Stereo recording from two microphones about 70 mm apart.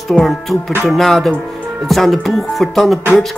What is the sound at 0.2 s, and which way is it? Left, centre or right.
Music, centre.